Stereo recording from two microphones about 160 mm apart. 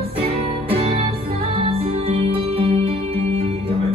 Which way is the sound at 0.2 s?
35° right (ahead or behind).